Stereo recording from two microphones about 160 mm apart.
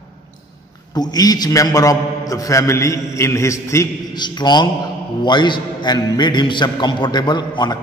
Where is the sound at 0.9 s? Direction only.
25° left (ahead or behind).